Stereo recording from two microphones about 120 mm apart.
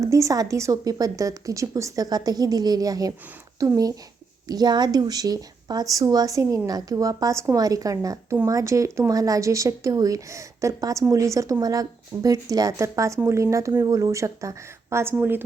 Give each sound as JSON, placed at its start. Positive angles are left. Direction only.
{"t": 0.0, "sound": "a woman's voice", "side_deg": -25}